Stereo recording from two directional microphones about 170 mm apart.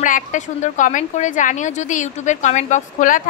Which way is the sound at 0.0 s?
50° left (ahead or behind).